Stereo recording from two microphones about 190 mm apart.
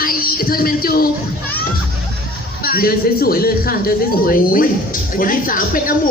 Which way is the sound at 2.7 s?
50° left (ahead or behind).